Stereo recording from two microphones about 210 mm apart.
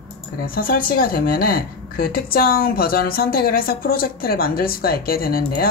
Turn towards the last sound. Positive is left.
turn(degrees=45)  # may be behind; listen again after turning